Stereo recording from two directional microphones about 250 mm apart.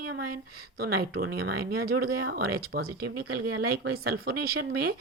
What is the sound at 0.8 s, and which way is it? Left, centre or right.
Speech, right.